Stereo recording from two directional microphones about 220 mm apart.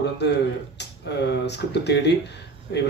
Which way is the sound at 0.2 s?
50° left (ahead or behind).